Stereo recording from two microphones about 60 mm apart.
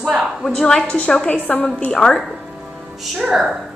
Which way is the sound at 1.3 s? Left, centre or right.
Left.